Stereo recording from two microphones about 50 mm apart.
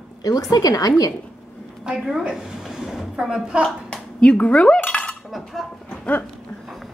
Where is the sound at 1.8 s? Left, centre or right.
Centre.